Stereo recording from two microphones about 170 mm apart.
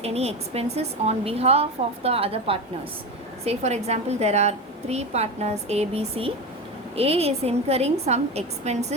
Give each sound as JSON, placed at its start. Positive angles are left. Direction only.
{"t": 0.0, "sound": "a woman's voice", "side_deg": -40}